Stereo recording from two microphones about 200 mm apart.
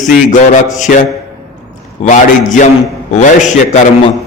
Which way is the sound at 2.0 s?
40° left (ahead or behind).